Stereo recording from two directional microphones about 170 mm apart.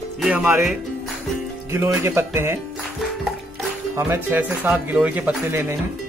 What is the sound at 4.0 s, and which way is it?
Speech, 10° right (ahead or behind).